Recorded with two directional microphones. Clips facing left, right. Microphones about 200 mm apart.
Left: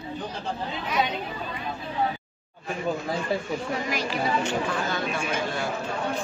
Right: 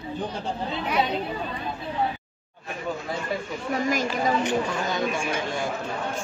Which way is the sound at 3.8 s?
45° right (ahead or behind).